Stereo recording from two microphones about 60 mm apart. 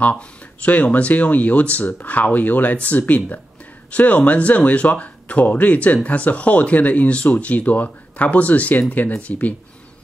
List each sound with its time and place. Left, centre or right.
0.6 s speech: left